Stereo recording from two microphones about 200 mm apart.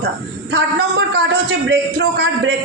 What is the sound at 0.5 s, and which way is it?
A man's voice, 60° right (ahead or behind).